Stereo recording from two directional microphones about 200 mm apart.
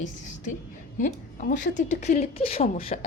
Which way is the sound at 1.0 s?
40° left (ahead or behind).